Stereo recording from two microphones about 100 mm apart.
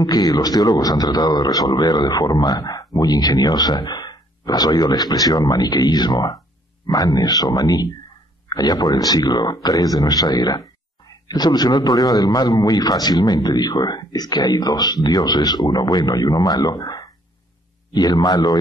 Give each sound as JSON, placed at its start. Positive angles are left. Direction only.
{"t": 0.0, "sound": "a man's voice", "side_deg": 40}